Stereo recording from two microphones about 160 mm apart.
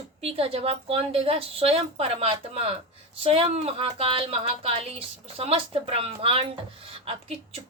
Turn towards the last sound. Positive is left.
turn(degrees=-40)  # may be behind; listen again after turning